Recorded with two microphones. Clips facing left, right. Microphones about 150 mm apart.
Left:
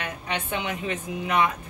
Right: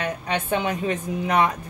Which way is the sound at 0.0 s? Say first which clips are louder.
Right 5 dB; 40° right (ahead or behind).